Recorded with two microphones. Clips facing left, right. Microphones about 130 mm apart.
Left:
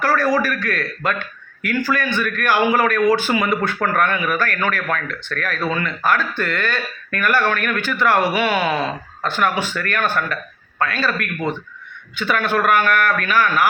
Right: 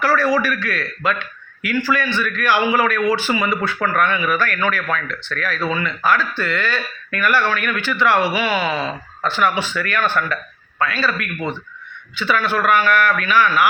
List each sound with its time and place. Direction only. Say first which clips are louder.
0.0 s speech: even; 45° left (ahead or behind)